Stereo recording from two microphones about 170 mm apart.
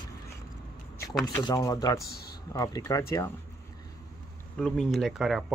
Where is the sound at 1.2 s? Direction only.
20° left (ahead or behind).